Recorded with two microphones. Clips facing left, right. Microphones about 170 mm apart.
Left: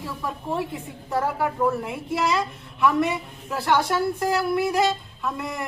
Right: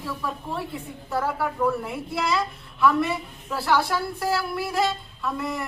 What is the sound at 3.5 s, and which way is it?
Speech, 20° left (ahead or behind).